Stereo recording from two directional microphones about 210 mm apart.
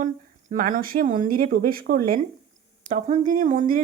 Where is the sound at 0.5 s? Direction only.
40° right (ahead or behind).